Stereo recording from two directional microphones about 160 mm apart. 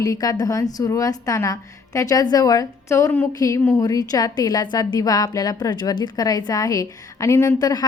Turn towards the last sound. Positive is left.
turn(degrees=25)  # may be behind; listen again after turning